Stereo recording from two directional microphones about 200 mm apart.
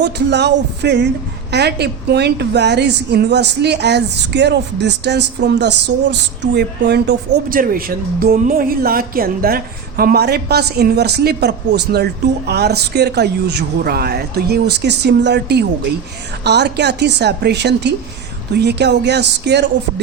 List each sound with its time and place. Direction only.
0.0 s a woman's voice: 60° right (ahead or behind)